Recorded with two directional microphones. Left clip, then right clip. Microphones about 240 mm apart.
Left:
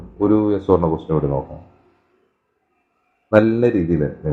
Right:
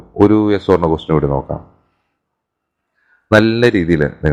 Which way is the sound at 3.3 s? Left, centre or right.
Right.